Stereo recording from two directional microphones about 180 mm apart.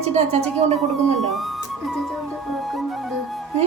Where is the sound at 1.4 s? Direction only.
Centre (ahead or behind).